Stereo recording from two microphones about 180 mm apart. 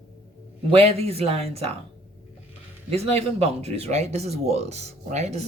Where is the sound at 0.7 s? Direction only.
35° right (ahead or behind).